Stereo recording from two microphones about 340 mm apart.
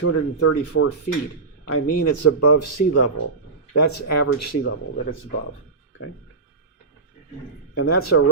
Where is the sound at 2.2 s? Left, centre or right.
Left.